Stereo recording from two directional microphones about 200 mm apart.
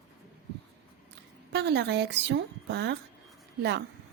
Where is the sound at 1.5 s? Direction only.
55° right (ahead or behind).